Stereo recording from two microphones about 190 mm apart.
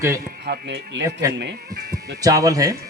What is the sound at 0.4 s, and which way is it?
Speech, 60° right (ahead or behind).